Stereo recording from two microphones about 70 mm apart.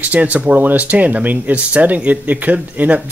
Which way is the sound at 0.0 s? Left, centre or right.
Right.